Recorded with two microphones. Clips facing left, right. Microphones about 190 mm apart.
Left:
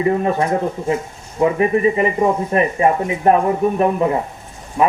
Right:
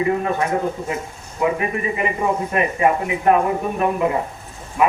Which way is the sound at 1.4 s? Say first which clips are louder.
Left 6 dB; 30° left (ahead or behind).